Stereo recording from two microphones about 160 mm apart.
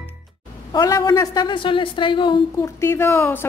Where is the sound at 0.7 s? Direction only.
25° left (ahead or behind).